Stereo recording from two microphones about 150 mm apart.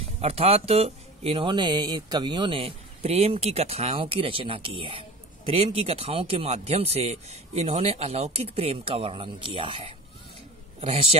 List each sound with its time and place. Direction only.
0.2 s speech: 40° right (ahead or behind)